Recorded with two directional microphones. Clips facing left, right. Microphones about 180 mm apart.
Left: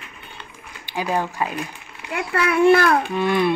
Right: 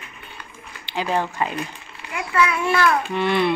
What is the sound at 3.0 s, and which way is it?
Speech, 10° left (ahead or behind).